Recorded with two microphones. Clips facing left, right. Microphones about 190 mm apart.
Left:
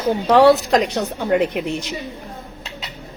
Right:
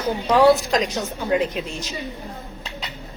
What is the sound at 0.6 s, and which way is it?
Speech, 65° left (ahead or behind).